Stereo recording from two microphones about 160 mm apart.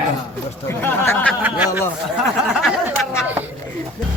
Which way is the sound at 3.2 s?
10° right (ahead or behind).